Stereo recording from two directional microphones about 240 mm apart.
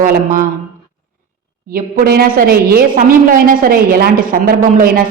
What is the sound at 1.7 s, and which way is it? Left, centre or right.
A woman's voice, right.